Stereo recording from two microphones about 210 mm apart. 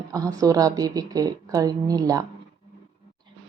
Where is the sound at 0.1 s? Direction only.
15° right (ahead or behind).